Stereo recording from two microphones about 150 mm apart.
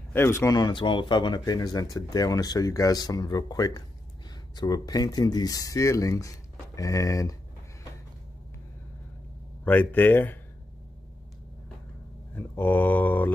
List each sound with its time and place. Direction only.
0.1 s speech: 15° left (ahead or behind)
9.7 s speech: 15° left (ahead or behind)
12.4 s speech: 15° left (ahead or behind)